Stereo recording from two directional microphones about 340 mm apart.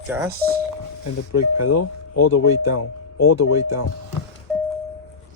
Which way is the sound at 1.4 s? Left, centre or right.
Left.